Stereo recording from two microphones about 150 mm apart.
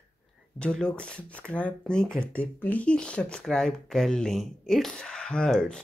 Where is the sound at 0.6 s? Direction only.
5° left (ahead or behind).